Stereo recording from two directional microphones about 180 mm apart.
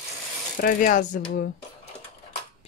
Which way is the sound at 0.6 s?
50° left (ahead or behind).